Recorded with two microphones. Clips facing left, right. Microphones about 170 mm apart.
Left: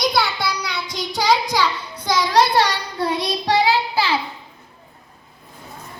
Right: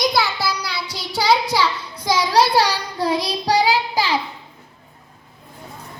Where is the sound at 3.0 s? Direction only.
35° right (ahead or behind).